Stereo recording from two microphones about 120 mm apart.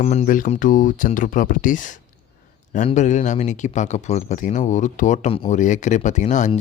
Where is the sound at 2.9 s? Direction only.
85° left.